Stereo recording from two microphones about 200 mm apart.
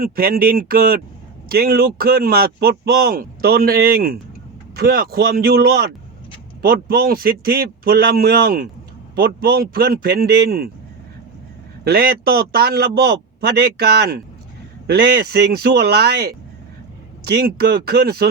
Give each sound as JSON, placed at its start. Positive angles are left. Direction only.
{"t": 0.0, "sound": "speech", "side_deg": -45}
{"t": 11.9, "sound": "speech", "side_deg": -50}